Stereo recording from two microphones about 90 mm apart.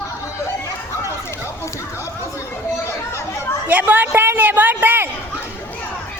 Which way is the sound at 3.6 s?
15° right (ahead or behind).